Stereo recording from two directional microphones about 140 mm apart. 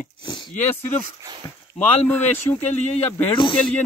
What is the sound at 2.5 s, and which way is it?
Speech, 25° left (ahead or behind).